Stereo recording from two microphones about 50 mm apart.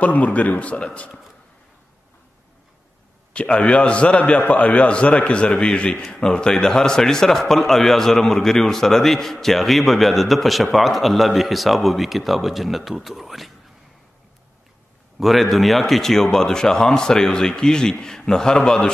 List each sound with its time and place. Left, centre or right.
0.0 s a man's voice: left
3.3 s a man's voice: left; by 13.5 s centre
15.1 s speech: centre